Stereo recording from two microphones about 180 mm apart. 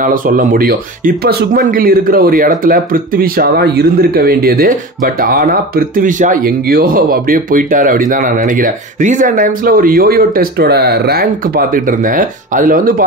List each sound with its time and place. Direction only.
0.0 s speech: 50° right (ahead or behind)